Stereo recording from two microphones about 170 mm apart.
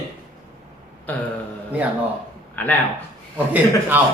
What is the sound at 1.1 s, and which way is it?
Speech, 10° left (ahead or behind).